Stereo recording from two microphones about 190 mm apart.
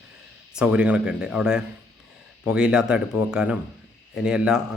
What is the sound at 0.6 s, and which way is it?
Speech, 5° right (ahead or behind).